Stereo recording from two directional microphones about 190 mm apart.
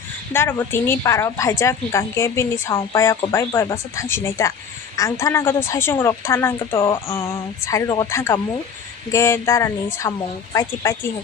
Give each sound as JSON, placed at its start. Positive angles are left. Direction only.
{"t": 0.3, "sound": "a woman's voice", "side_deg": 10}
{"t": 6.7, "sound": "a sound", "side_deg": 25}
{"t": 7.1, "sound": "a woman's voice", "side_deg": 15}